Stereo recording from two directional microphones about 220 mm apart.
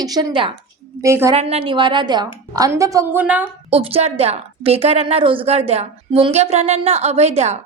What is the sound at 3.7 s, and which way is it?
A woman's voice, 25° right (ahead or behind).